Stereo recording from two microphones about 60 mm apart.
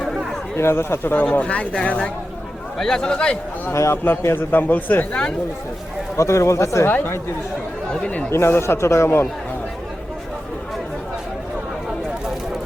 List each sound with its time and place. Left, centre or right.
0.5 s speech: left
1.1 s speech: left
2.7 s a man's voice: centre
3.7 s speech: left
3.9 s a man's voice: left
6.1 s speech: left
6.8 s a man's voice: left
8.0 s speech: centre
8.3 s speech: left